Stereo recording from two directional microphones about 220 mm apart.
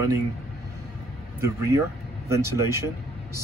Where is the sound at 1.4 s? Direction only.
15° right (ahead or behind).